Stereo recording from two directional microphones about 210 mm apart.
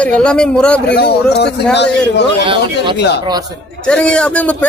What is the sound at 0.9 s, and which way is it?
Speech, 50° left (ahead or behind).